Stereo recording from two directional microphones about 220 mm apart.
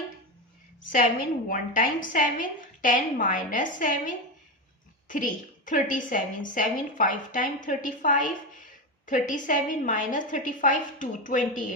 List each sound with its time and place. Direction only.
1.5 s a woman's voice: 40° left (ahead or behind)